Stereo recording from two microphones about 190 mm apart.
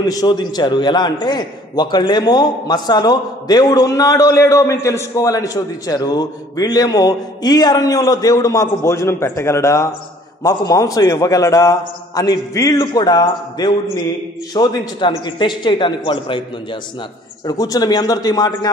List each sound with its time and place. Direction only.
0.1 s a man's voice: 20° left (ahead or behind)
17.5 s a man's voice: 20° left (ahead or behind)